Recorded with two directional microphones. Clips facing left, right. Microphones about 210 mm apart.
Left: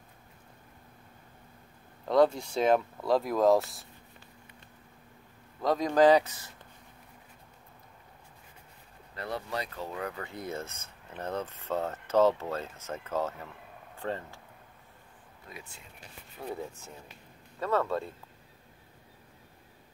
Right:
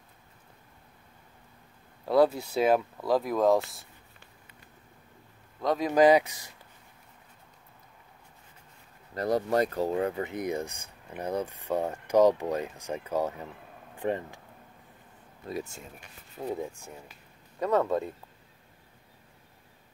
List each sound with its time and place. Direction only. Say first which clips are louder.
2.0 s speech: right 1 dB; 5° right (ahead or behind)
5.6 s speech: right 1 dB; centre (ahead or behind)
9.1 s speech: right 10 dB; 40° right (ahead or behind); by 14.4 s 15° right (ahead or behind)
15.4 s speech: right 13 dB; 40° right (ahead or behind)
16.4 s speech: right 4 dB; 15° right (ahead or behind)